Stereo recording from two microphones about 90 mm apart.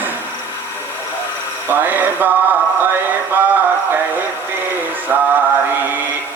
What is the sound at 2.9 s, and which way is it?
Music, 20° right (ahead or behind).